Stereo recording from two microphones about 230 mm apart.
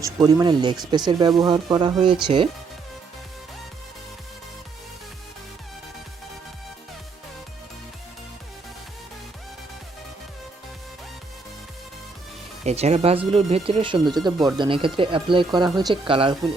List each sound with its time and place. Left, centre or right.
0.0 s speech: centre
12.6 s speech: right